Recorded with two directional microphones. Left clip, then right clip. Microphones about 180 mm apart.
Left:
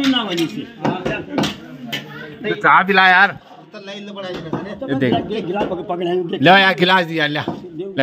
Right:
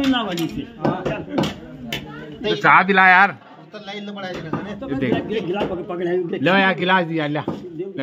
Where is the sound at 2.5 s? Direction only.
40° left (ahead or behind).